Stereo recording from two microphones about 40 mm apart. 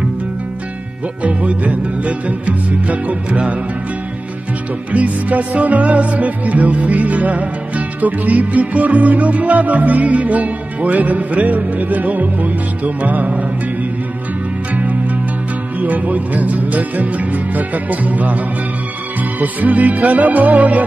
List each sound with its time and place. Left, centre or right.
1.2 s music: right
4.9 s music: right
14.7 s music: right
19.4 s music: right